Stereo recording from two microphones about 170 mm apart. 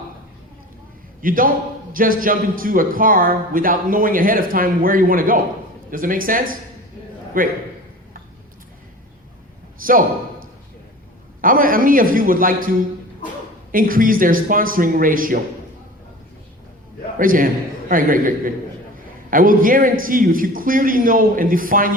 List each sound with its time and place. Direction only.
1.2 s a man's voice: 55° right (ahead or behind)
9.8 s a man's voice: 55° right (ahead or behind)
11.3 s a man's voice: 55° right (ahead or behind)
17.2 s a man's voice: 55° right (ahead or behind)